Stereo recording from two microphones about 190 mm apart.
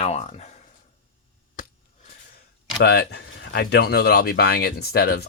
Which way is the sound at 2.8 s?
60° left (ahead or behind).